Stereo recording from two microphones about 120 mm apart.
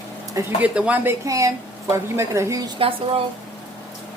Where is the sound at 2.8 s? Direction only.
50° right (ahead or behind).